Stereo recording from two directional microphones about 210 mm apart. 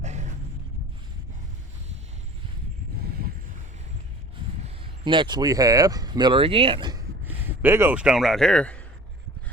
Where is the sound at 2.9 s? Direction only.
45° right (ahead or behind).